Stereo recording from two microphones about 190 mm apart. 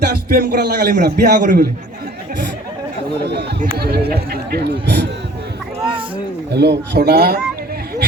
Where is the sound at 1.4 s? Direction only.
45° right (ahead or behind).